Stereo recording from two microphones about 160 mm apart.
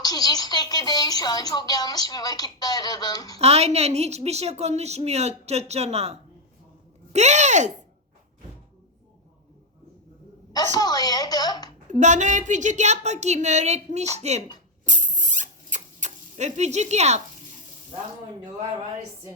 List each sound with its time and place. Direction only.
0.0 s speech: 25° left (ahead or behind)
3.3 s a woman's voice: 40° right (ahead or behind)
10.5 s speech: 25° left (ahead or behind)
11.9 s a woman's voice: 50° right (ahead or behind)
14.8 s rodents: 50° right (ahead or behind)